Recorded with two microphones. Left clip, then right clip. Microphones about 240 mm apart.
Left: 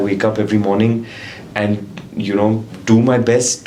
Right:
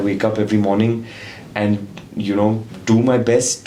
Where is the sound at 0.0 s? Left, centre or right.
Right.